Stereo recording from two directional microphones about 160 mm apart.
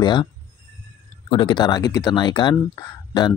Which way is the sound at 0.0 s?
30° left (ahead or behind).